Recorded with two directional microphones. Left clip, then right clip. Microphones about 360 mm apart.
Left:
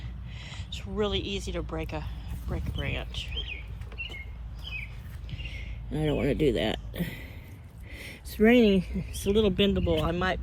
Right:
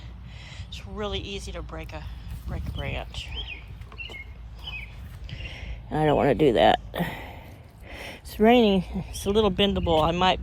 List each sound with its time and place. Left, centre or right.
0.3 s speech: centre
5.3 s a sound: centre
9.3 s speech: centre